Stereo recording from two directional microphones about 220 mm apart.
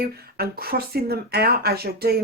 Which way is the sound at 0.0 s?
45° right (ahead or behind).